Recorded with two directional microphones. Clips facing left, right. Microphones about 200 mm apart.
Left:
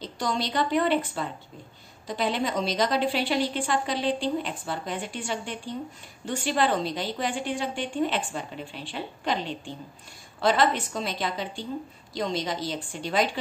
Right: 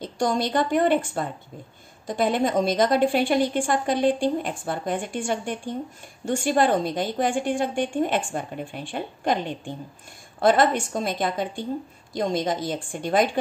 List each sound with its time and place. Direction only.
0.0 s a woman's voice: 50° right (ahead or behind)